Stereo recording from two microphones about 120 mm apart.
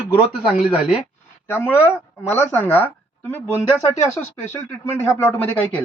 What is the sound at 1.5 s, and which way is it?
Speech, 20° left (ahead or behind).